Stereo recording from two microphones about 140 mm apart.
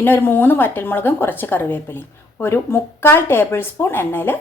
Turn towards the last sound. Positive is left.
turn(degrees=15)  # may be behind; listen again after turning